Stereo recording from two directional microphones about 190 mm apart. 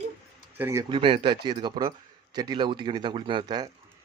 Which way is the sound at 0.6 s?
15° right (ahead or behind).